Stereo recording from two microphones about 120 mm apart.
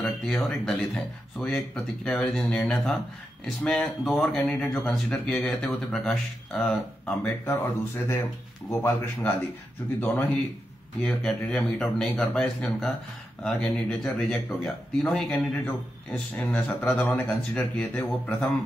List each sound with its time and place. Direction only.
0.0 s a man's voice: centre (ahead or behind)
7.2 s a man's voice: 15° left (ahead or behind)